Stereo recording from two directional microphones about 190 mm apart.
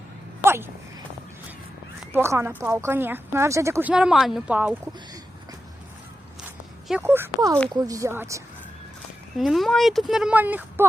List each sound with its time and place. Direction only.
0.4 s a sound: 10° right (ahead or behind)
2.1 s speech: 15° right (ahead or behind)
7.0 s speech: 10° right (ahead or behind)
9.4 s speech: centre (ahead or behind)